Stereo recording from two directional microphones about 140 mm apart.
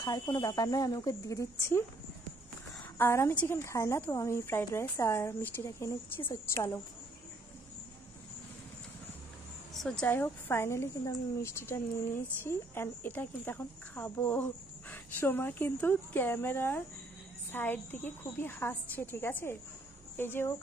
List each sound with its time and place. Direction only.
0.0 s a woman's voice: 25° left (ahead or behind)
3.0 s a woman's voice: 20° left (ahead or behind)
9.8 s a woman's voice: 5° left (ahead or behind)